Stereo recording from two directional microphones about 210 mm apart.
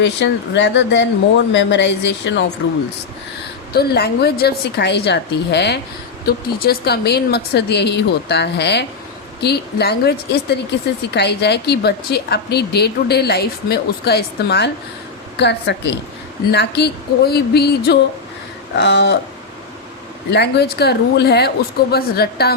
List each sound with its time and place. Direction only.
0.0 s speech: 55° left (ahead or behind)
3.8 s a woman's voice: 50° left (ahead or behind)
20.3 s a woman's voice: 50° left (ahead or behind)